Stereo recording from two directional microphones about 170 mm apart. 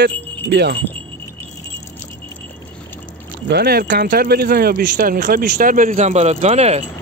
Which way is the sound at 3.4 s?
70° right (ahead or behind).